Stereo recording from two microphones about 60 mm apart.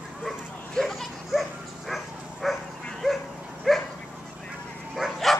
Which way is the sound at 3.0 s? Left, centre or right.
Centre.